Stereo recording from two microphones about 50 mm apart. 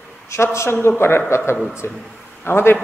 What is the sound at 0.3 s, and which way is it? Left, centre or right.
Speech, left.